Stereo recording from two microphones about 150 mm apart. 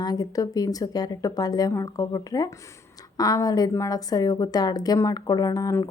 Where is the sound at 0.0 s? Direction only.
25° left (ahead or behind).